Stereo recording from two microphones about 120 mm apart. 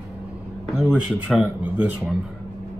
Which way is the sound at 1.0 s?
10° right (ahead or behind).